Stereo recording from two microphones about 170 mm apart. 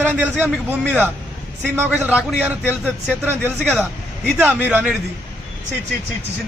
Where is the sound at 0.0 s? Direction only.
10° right (ahead or behind).